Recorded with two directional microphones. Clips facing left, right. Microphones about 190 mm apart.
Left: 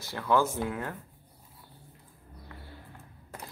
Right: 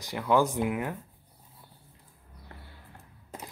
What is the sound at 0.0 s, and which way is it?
Speech, 15° right (ahead or behind).